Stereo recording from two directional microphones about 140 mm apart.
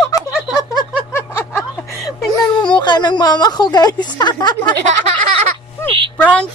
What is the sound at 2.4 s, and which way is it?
Speech, 30° left (ahead or behind).